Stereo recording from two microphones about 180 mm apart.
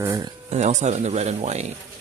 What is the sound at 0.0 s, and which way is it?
Speech, 15° right (ahead or behind).